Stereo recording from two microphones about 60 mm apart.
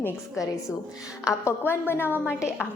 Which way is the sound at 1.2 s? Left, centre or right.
Left.